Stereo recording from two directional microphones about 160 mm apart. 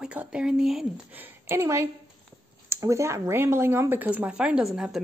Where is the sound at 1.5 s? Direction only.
20° right (ahead or behind).